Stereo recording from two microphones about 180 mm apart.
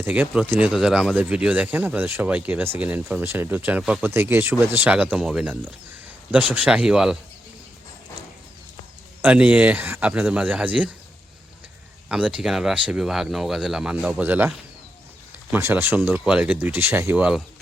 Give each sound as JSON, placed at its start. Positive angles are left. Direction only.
{"t": 0.0, "sound": "speech", "side_deg": -10}
{"t": 9.2, "sound": "speech", "side_deg": -5}
{"t": 12.0, "sound": "speech", "side_deg": -5}
{"t": 15.5, "sound": "speech", "side_deg": -10}